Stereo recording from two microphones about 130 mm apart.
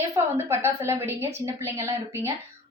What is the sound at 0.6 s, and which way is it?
A woman's voice, 20° right (ahead or behind).